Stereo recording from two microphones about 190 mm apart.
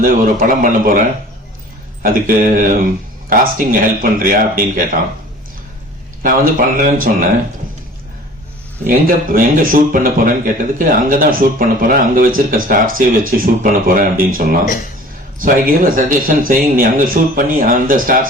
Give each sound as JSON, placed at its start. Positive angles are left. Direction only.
{"t": 0.0, "sound": "a man's voice", "side_deg": -50}
{"t": 6.2, "sound": "a man's voice", "side_deg": -45}
{"t": 8.9, "sound": "a man's voice", "side_deg": -50}
{"t": 14.6, "sound": "speech", "side_deg": 45}
{"t": 15.4, "sound": "a man's voice", "side_deg": -50}